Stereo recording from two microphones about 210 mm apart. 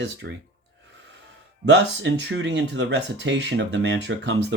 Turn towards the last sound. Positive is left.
turn(degrees=-55)  # may be behind; listen again after turning